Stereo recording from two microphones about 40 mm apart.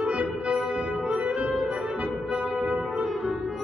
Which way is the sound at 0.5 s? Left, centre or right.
Centre.